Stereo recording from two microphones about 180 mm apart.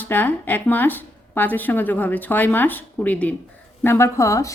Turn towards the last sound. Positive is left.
turn(degrees=15)  # may be behind; listen again after turning